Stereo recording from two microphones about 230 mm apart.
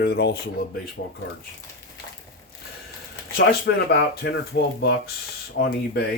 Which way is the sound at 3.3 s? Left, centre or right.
Left.